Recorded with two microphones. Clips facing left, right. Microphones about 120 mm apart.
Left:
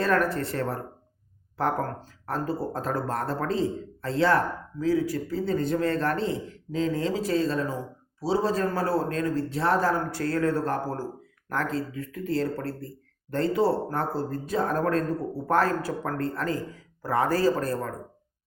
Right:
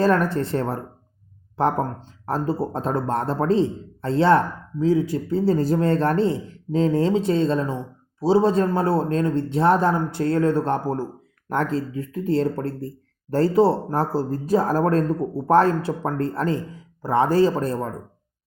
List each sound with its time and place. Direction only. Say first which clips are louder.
0.0 s speech: right 5 dB; 30° right (ahead or behind)